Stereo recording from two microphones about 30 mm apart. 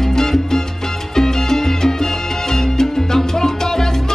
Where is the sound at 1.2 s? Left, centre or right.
Centre.